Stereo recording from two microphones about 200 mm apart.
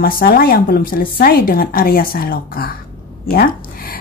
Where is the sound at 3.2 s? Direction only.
45° left (ahead or behind).